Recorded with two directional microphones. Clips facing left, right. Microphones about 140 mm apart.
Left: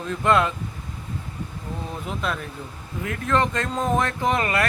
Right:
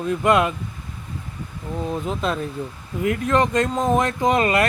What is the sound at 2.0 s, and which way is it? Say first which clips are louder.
Speech: right 4 dB; 25° right (ahead or behind).